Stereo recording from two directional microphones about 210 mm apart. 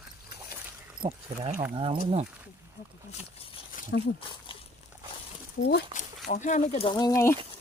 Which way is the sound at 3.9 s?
55° left (ahead or behind).